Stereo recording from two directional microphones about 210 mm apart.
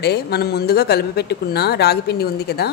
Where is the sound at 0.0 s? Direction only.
50° left (ahead or behind).